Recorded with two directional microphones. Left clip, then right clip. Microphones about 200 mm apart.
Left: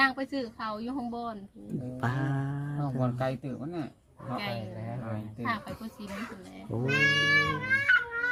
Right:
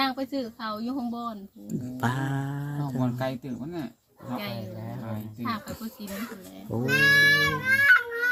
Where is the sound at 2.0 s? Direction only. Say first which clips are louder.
Right 4 dB; 10° right (ahead or behind).